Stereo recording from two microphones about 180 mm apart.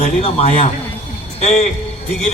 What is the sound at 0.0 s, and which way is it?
Speech, 35° left (ahead or behind).